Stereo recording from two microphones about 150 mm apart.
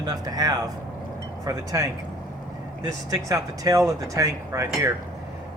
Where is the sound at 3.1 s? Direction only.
25° right (ahead or behind).